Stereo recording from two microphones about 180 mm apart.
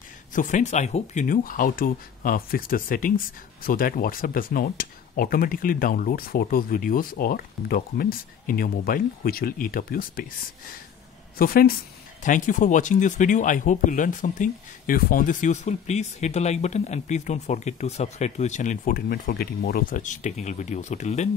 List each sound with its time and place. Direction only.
0.3 s speech: 45° left (ahead or behind)
11.3 s a woman's voice: 55° left (ahead or behind)